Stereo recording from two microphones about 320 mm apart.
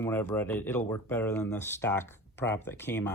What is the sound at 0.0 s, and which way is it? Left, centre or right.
Speech, centre.